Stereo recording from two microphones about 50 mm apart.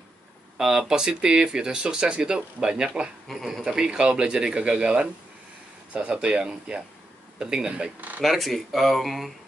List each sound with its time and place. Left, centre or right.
0.6 s speech: centre
3.3 s speech: centre
3.6 s speech: centre
8.2 s speech: centre